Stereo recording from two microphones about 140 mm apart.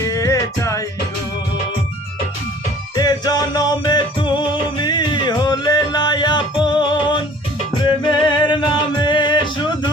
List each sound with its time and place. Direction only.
0.1 s music: 25° left (ahead or behind)
2.9 s music: 30° left (ahead or behind)